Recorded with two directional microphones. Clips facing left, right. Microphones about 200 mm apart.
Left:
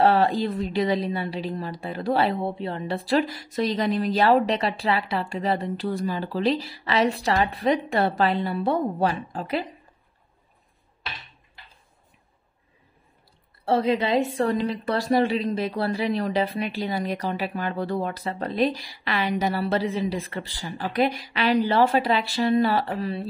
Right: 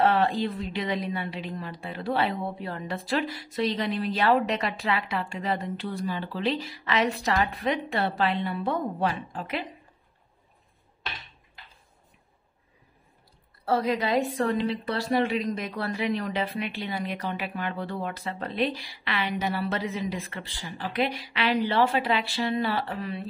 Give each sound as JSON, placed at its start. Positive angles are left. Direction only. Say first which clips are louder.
{"t": 0.0, "sound": "a woman's voice", "louder": "left 3 dB", "side_deg": 35}
{"t": 13.7, "sound": "a woman's voice", "louder": "left 3 dB", "side_deg": 25}
{"t": 14.4, "sound": "a woman's voice", "louder": "left 2 dB", "side_deg": 40}